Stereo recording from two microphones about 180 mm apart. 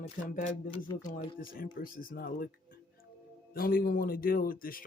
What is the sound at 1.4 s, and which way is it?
Speech, 55° left (ahead or behind).